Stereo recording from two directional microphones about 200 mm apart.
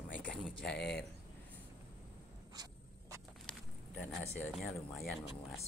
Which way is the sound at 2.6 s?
20° right (ahead or behind).